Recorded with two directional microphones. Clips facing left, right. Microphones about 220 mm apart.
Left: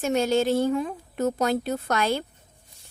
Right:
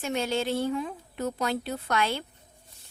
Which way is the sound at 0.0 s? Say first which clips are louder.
Left 6 dB; 45° left (ahead or behind).